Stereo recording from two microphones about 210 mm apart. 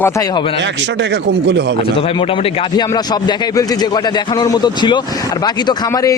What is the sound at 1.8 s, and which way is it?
A man's voice, 25° left (ahead or behind).